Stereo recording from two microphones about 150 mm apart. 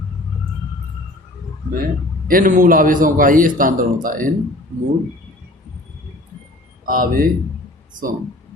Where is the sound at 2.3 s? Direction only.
65° right (ahead or behind).